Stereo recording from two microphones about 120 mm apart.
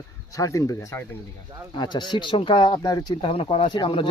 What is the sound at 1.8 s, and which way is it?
Speech, 40° left (ahead or behind).